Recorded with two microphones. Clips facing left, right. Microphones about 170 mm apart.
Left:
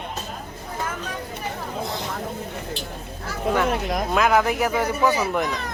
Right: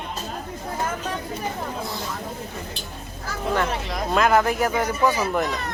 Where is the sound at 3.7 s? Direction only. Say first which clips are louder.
Left 4 dB; 50° left (ahead or behind).